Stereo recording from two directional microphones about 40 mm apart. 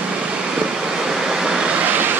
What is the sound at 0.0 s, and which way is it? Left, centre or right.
Waves, right.